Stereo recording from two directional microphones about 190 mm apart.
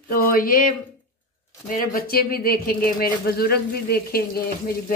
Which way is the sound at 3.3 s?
55° left (ahead or behind).